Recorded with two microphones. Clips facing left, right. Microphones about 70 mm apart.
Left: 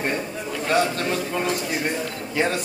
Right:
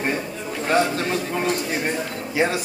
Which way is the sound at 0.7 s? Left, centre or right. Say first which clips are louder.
Right 1 dB; centre.